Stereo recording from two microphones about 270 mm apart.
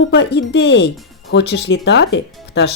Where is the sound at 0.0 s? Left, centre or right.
Left.